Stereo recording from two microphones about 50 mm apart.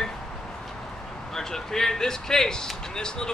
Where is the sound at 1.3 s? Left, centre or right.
Centre.